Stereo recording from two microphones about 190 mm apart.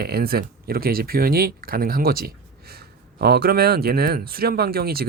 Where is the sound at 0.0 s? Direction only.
55° right (ahead or behind).